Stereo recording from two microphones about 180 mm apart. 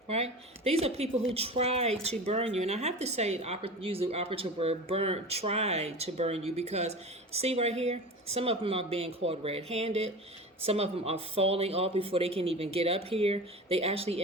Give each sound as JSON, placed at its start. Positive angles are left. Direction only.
{"t": 0.1, "sound": "speech", "side_deg": -35}